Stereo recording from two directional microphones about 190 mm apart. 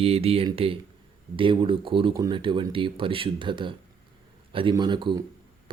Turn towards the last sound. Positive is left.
turn(degrees=-25)  # may be behind; listen again after turning